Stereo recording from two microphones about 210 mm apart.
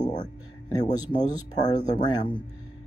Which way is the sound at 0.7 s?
20° left (ahead or behind).